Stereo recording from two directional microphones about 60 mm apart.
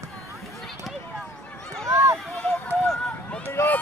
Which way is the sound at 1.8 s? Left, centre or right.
Right.